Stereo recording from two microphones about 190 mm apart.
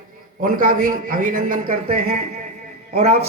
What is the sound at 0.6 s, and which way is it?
Speech, 45° right (ahead or behind).